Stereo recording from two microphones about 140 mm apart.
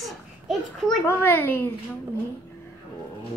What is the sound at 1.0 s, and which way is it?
Speech, 15° left (ahead or behind).